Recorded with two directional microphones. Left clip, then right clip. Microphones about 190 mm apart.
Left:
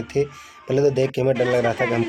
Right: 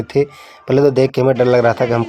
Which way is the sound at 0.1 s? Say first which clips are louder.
Right 6 dB; 20° right (ahead or behind).